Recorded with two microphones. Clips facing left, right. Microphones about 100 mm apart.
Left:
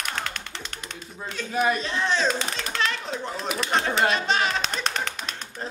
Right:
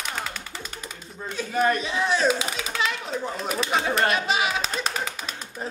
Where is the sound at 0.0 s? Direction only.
5° right (ahead or behind).